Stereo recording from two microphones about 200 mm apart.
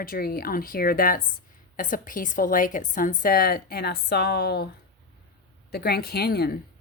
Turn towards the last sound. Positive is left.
turn(degrees=50)  # may be behind; listen again after turning